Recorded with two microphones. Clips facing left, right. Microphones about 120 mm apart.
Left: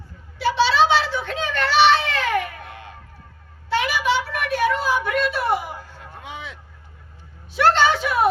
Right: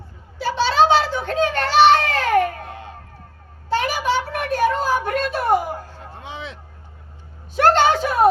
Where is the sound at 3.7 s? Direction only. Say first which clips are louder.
Right 1 dB; 40° right (ahead or behind).